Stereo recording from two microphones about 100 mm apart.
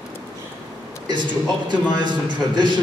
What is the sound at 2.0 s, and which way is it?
Speech, 50° right (ahead or behind).